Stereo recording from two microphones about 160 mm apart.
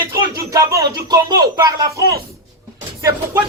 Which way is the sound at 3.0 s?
20° right (ahead or behind).